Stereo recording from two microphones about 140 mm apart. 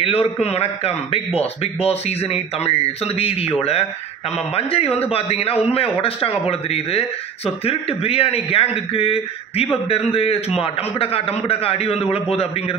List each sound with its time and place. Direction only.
0.0 s a man's voice: 45° left (ahead or behind)